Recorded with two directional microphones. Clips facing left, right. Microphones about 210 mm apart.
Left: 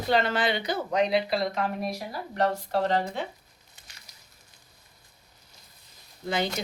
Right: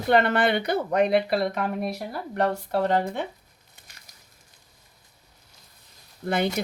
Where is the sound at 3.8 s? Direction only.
55° right (ahead or behind).